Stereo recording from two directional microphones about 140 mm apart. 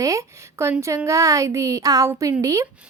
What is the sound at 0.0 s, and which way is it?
A woman's voice, 20° right (ahead or behind).